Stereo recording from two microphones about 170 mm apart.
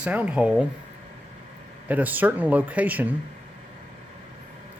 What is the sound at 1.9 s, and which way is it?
Speech, 10° right (ahead or behind).